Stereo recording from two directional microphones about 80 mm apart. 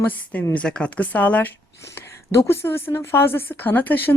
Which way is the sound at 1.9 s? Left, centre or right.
Left.